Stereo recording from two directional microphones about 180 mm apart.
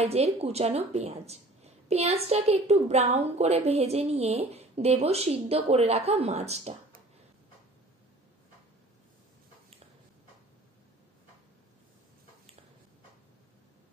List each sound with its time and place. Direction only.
0.0 s speech: 35° right (ahead or behind)